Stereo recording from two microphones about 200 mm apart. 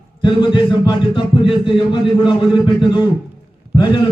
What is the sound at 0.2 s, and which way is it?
A man's voice, 25° left (ahead or behind).